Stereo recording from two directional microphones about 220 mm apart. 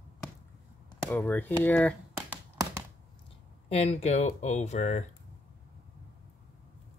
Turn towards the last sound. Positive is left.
turn(degrees=30)  # may be behind; listen again after turning